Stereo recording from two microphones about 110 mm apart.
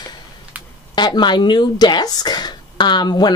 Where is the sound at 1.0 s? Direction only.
45° left (ahead or behind).